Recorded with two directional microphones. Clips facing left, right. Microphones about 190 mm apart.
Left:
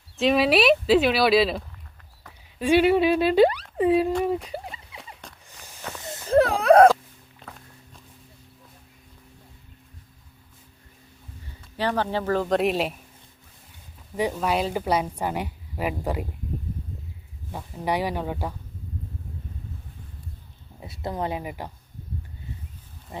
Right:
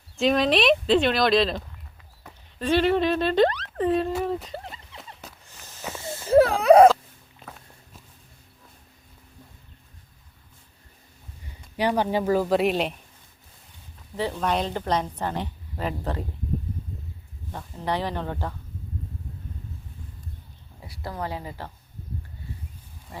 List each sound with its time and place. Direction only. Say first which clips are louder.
0.2 s a woman's voice: left 1 dB; 5° left (ahead or behind)
4.4 s a sound: left 2 dB; 10° left (ahead or behind)
6.2 s a sound: right 2 dB; 5° right (ahead or behind)
11.8 s speech: right 2 dB; 15° right (ahead or behind); by 13.0 s centre (ahead or behind)
14.2 s a woman's voice: left 1 dB; 10° left (ahead or behind)
17.5 s a woman's voice: left 2 dB; 10° left (ahead or behind)
20.8 s speech: left 4 dB; 20° left (ahead or behind)